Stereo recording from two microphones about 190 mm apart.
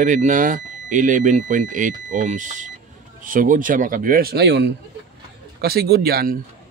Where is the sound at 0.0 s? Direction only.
40° right (ahead or behind).